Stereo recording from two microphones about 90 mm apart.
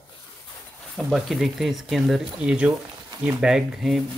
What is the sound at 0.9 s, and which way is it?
Speech, centre (ahead or behind).